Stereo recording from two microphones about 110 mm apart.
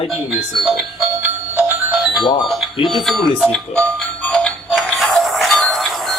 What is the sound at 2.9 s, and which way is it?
Speech, centre (ahead or behind).